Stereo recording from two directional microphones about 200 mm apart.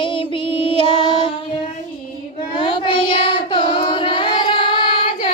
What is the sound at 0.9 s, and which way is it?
Female singing, 20° left (ahead or behind).